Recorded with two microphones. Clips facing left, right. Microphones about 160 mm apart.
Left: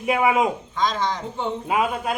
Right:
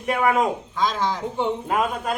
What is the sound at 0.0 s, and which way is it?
Speech, 5° left (ahead or behind).